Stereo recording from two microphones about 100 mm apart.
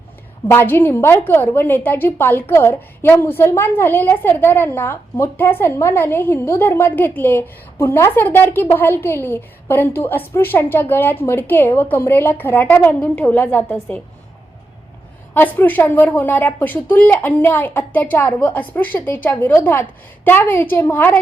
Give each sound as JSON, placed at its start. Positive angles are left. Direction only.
{"t": 0.5, "sound": "a woman's voice", "side_deg": 25}
{"t": 15.3, "sound": "a woman's voice", "side_deg": 20}